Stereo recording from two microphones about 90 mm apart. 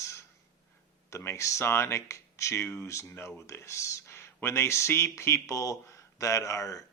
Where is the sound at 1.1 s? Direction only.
30° left (ahead or behind).